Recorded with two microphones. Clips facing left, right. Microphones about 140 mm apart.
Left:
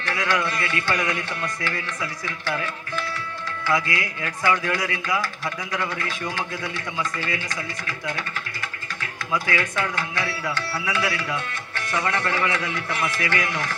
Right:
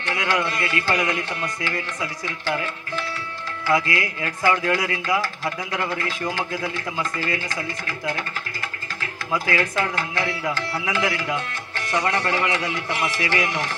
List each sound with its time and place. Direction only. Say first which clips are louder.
0.0 s a man's voice: right 1 dB; 25° right (ahead or behind)
3.7 s a man's voice: right 3 dB; 25° right (ahead or behind)
9.7 s a man's voice: right 2 dB; 25° right (ahead or behind)